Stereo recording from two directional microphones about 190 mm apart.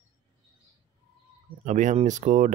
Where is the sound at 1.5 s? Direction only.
40° right (ahead or behind).